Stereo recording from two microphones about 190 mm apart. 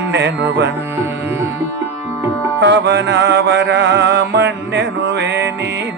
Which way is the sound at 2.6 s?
70° right (ahead or behind).